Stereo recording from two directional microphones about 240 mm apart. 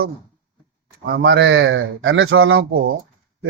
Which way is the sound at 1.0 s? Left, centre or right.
Right.